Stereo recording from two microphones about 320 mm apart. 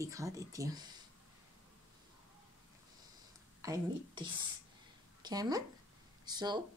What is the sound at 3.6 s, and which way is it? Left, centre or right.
A woman's voice, centre.